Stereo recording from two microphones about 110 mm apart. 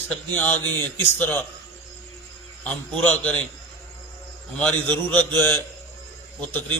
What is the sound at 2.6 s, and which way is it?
Speech, 10° left (ahead or behind).